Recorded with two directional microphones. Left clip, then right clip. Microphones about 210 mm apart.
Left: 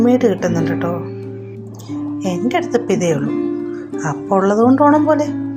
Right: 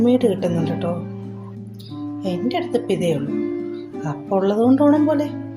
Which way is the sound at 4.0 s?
10° left (ahead or behind).